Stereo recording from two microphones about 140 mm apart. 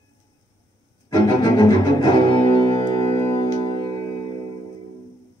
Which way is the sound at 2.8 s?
30° left (ahead or behind).